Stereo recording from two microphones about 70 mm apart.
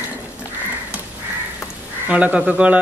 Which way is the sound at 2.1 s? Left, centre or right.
Centre.